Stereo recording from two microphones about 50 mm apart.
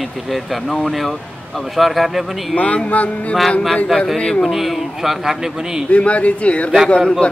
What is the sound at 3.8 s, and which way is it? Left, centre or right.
Speech, centre.